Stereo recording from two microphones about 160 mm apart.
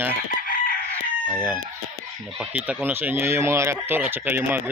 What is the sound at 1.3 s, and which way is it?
Speech, 10° right (ahead or behind).